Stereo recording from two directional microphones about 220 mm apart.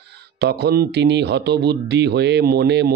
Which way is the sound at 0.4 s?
50° right (ahead or behind).